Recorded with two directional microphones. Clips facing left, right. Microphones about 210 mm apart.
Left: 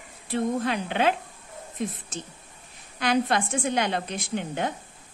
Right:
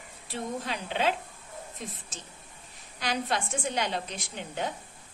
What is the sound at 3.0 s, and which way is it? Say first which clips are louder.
A woman's voice: left 7 dB; 55° left (ahead or behind).